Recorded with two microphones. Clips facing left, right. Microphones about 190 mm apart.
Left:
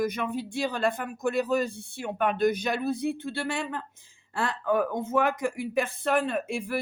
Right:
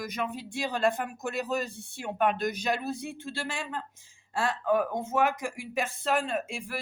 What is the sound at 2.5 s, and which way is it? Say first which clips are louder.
Speech: left 3 dB; 55° left (ahead or behind).